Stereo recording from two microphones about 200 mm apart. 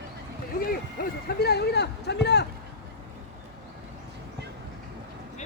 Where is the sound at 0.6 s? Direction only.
50° left (ahead or behind).